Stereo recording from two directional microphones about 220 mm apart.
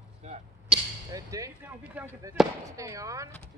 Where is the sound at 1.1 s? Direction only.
15° right (ahead or behind).